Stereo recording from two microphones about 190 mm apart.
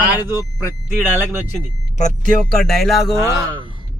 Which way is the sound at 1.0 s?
10° right (ahead or behind).